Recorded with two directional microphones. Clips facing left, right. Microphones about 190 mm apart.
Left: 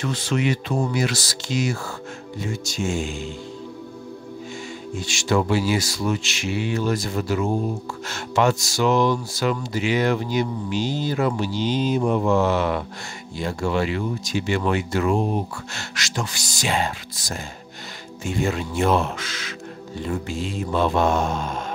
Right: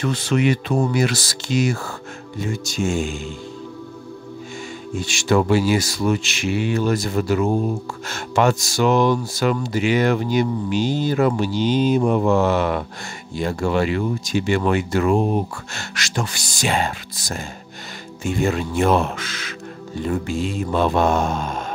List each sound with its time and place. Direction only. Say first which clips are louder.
0.0 s speech: right 4 dB; 60° right (ahead or behind)
5.0 s speech: right 3 dB; 55° right (ahead or behind)